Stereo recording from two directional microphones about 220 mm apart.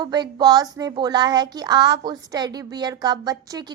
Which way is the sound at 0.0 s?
20° right (ahead or behind).